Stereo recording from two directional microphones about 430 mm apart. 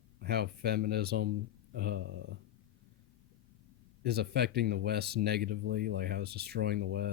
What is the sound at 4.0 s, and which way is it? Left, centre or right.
Speech, right.